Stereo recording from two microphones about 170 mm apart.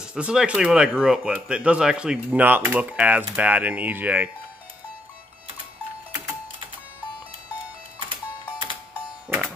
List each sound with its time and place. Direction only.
0.0 s speech: 5° right (ahead or behind)
8.0 s music: 30° right (ahead or behind)